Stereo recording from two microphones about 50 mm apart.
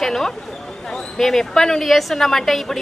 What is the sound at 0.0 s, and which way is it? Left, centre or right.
A woman's voice, centre.